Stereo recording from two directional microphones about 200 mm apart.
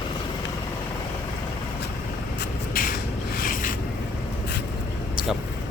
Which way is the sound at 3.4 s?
45° left (ahead or behind).